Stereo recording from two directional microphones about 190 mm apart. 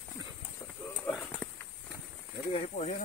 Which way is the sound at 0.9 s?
5° left (ahead or behind).